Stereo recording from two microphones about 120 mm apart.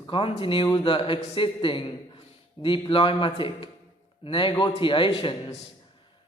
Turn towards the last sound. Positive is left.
turn(degrees=45)  # may be behind; listen again after turning